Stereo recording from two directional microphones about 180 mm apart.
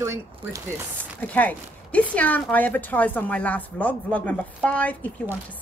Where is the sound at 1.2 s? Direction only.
10° left (ahead or behind).